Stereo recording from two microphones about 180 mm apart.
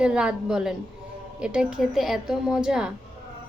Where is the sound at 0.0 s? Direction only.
5° right (ahead or behind).